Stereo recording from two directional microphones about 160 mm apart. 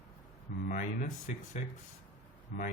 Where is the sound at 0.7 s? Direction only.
55° left (ahead or behind).